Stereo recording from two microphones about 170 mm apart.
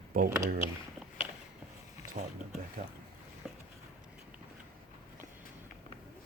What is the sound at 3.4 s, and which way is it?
Boat, centre (ahead or behind).